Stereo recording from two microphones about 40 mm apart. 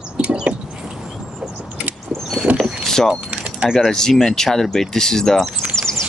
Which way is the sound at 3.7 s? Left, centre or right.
Centre.